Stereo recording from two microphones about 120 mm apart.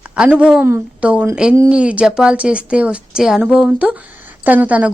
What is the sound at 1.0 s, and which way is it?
Speech, 10° right (ahead or behind).